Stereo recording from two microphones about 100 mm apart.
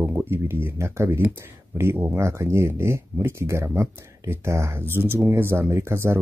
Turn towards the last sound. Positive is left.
turn(degrees=-25)  # may be behind; listen again after turning